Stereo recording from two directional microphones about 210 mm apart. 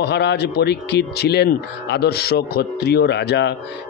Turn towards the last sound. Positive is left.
turn(degrees=55)  # may be behind; listen again after turning